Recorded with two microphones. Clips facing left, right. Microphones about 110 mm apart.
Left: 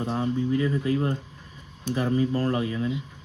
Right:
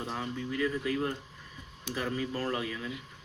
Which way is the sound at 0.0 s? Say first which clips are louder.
Left 9 dB; 25° left (ahead or behind).